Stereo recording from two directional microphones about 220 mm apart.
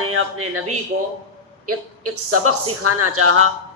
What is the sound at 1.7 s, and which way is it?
A man's voice, 90° right.